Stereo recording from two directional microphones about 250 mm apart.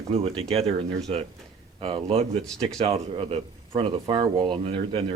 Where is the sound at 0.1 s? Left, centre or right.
Right.